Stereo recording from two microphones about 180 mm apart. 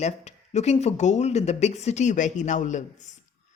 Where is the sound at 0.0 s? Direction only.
40° left (ahead or behind).